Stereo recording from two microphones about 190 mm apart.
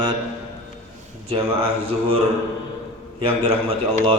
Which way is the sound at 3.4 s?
30° right (ahead or behind).